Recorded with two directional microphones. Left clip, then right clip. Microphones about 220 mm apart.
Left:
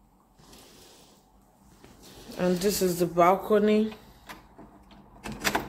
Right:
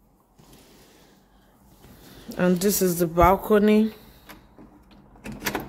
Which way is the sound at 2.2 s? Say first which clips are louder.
Right 3 dB; 30° right (ahead or behind).